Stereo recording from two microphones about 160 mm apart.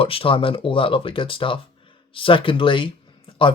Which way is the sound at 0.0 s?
35° left (ahead or behind).